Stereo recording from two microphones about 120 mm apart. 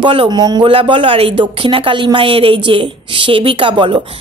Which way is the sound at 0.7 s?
45° right (ahead or behind).